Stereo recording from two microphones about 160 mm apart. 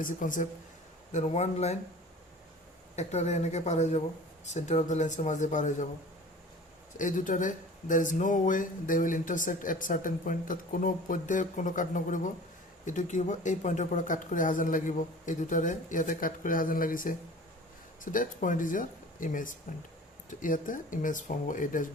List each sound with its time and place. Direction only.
0.0 s speech: 55° left (ahead or behind)
1.1 s speech: 40° left (ahead or behind)
2.9 s speech: 45° left (ahead or behind)
6.9 s speech: 55° left (ahead or behind)